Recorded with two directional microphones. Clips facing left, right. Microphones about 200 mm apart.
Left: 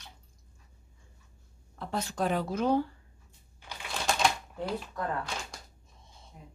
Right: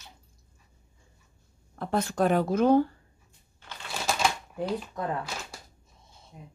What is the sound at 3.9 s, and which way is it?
Typewriter, centre (ahead or behind).